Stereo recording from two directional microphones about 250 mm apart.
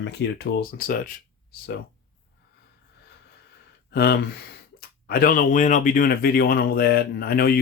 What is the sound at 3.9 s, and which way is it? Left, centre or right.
Speech, left.